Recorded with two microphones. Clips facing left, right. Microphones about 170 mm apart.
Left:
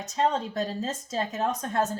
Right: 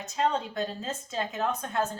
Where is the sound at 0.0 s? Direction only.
40° left (ahead or behind).